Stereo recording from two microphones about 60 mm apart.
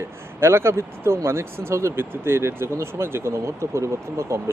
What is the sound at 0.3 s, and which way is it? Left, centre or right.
Speech, right.